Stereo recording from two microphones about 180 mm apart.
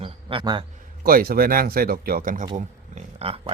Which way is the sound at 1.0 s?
55° right (ahead or behind).